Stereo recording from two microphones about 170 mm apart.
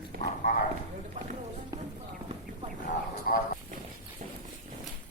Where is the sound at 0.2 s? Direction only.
50° left (ahead or behind).